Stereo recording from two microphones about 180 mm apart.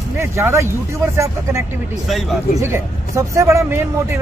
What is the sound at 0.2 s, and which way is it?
Speech, 15° right (ahead or behind).